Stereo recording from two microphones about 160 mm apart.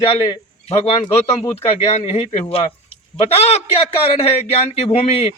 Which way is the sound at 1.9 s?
40° left (ahead or behind).